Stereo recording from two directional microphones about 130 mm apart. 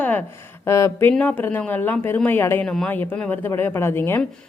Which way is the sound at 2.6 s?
5° left (ahead or behind).